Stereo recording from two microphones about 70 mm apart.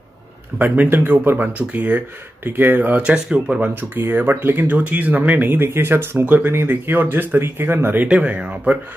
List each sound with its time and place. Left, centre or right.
0.6 s speech: right
3.9 s speech: right
8.1 s speech: centre